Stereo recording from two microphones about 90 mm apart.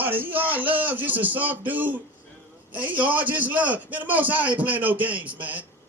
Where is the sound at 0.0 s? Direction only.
20° right (ahead or behind).